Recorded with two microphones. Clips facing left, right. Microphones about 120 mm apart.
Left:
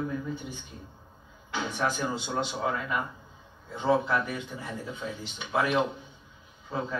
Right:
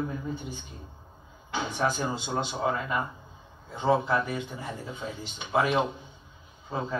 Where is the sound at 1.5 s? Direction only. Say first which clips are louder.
Right 1 dB; 20° right (ahead or behind).